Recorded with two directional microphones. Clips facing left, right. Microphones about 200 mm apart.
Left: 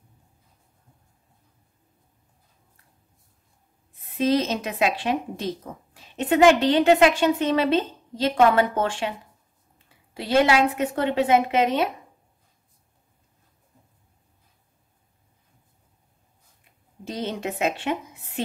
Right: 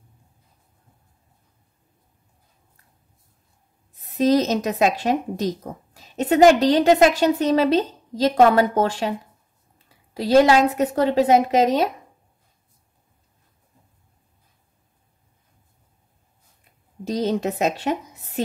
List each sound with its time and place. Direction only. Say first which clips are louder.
4.1 s speech: right 4 dB; 40° right (ahead or behind)
17.0 s speech: right 7 dB; 40° right (ahead or behind)